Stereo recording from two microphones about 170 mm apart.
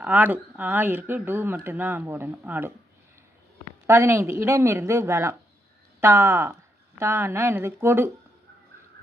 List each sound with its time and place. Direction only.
0.0 s speech: 10° right (ahead or behind)
3.8 s speech: 15° right (ahead or behind)